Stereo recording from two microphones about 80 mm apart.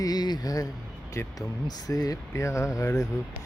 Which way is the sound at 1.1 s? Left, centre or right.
Left.